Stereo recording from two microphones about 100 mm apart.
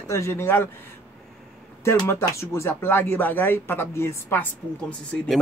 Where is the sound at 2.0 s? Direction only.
25° left (ahead or behind).